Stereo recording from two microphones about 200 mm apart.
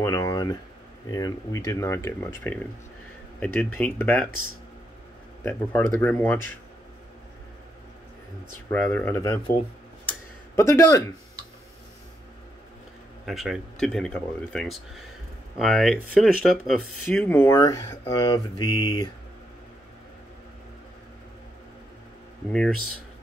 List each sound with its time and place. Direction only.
0.0 s a sound: 15° left (ahead or behind)
1.1 s speech: 20° left (ahead or behind)
5.4 s speech: 10° left (ahead or behind)
8.7 s speech: 10° left (ahead or behind)
10.5 s speech: 15° left (ahead or behind)
13.2 s speech: centre (ahead or behind); by 19.0 s 20° left (ahead or behind)